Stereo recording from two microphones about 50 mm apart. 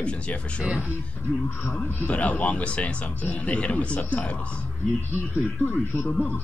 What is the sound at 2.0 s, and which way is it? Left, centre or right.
Speech, left.